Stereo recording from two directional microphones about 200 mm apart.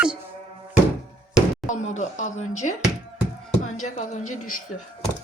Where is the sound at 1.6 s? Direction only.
40° left (ahead or behind).